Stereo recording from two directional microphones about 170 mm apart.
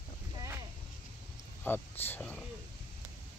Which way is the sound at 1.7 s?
10° left (ahead or behind).